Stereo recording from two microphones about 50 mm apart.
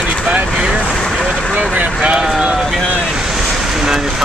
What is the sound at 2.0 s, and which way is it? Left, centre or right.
Vehicle, centre.